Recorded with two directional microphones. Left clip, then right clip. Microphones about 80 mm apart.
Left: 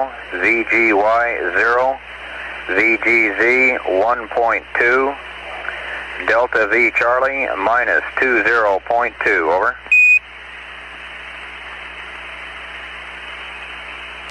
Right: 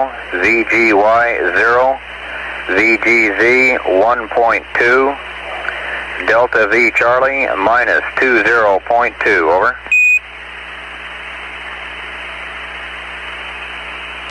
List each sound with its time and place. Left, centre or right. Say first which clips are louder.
0.0 s speech: right 4 dB; left